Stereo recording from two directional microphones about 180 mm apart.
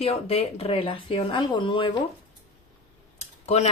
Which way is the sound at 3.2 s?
35° left (ahead or behind).